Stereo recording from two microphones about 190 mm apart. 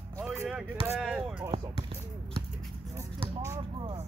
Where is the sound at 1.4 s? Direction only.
25° right (ahead or behind).